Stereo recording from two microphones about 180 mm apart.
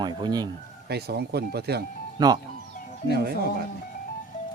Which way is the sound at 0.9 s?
65° right (ahead or behind).